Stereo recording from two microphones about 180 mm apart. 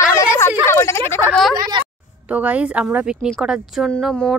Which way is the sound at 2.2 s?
10° right (ahead or behind).